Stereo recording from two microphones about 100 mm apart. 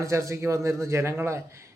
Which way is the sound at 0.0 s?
30° right (ahead or behind).